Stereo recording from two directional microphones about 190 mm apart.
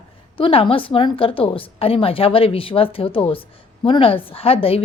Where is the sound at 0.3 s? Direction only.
30° left (ahead or behind).